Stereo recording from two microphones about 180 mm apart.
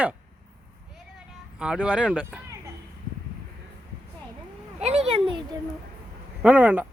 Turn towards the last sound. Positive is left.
turn(degrees=-10)  # may be behind; listen again after turning